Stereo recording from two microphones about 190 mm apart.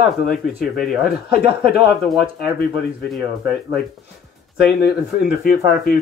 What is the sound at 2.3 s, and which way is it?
Speech, 55° left (ahead or behind).